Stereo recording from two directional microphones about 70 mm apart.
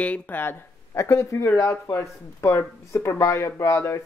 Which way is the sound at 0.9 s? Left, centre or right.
Left.